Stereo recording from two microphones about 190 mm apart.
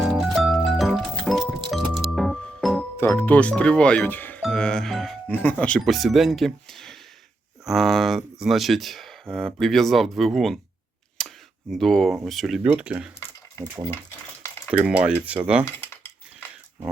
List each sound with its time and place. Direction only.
0.0 s music: centre (ahead or behind)
3.1 s speech: 10° left (ahead or behind)
11.2 s a sound: 5° left (ahead or behind)
11.7 s speech: centre (ahead or behind)
14.7 s a sound: 5° right (ahead or behind)
15.6 s cutlery: 10° left (ahead or behind)